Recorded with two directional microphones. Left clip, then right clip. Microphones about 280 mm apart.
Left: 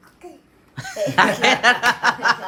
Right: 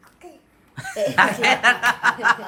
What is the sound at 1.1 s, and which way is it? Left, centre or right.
Speech, centre.